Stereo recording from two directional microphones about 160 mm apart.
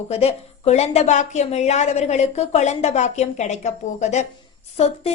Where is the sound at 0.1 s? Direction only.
40° left (ahead or behind).